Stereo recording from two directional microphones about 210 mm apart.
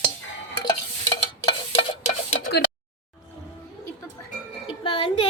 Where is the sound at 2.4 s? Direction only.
50° left (ahead or behind).